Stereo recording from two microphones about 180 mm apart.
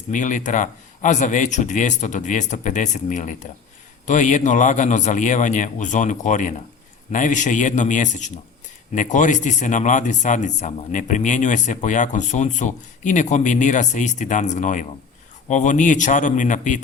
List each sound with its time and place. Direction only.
0.1 s speech: 45° left (ahead or behind)